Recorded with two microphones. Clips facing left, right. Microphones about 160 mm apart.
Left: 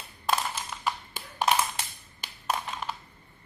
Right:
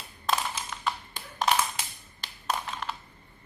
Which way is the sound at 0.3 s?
5° left (ahead or behind).